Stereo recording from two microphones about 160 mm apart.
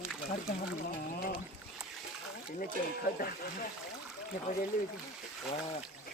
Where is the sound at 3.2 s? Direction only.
65° left (ahead or behind).